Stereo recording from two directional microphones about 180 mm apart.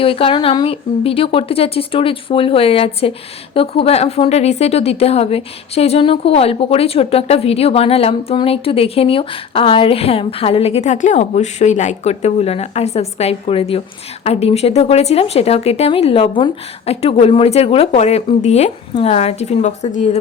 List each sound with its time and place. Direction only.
0.0 s a woman's voice: 30° left (ahead or behind)